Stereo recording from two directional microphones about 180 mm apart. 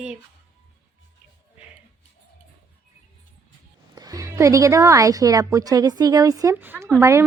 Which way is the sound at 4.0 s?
20° right (ahead or behind).